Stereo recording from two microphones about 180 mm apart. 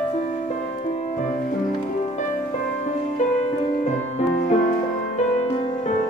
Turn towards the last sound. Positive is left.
turn(degrees=45)  # may be behind; listen again after turning